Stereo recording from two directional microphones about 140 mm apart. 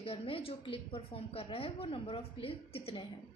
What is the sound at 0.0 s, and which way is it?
A woman's voice, 40° left (ahead or behind).